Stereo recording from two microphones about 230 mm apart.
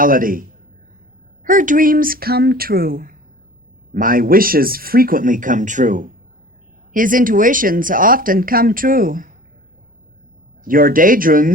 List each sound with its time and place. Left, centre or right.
0.0 s speech: right
1.5 s speech: right
10.6 s speech: right